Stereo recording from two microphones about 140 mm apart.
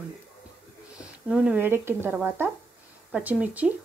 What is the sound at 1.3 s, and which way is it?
Speech, 10° right (ahead or behind).